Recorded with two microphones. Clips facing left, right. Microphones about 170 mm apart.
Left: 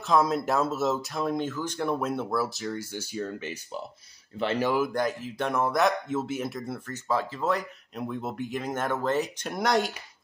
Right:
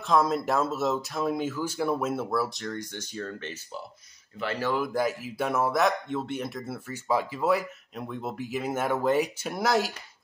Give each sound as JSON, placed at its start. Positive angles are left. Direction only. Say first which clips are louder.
{"t": 0.0, "sound": "speech", "louder": "even", "side_deg": 0}
{"t": 4.4, "sound": "speech", "louder": "left 3 dB", "side_deg": 20}
{"t": 4.7, "sound": "speech", "louder": "left 1 dB", "side_deg": 0}